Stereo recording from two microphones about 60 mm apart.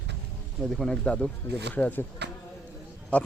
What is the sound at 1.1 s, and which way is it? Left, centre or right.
Speech, left.